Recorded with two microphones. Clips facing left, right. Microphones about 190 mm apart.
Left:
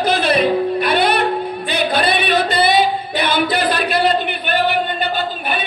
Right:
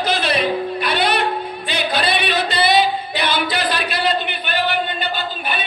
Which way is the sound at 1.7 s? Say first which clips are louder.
Left 3 dB; 55° left (ahead or behind).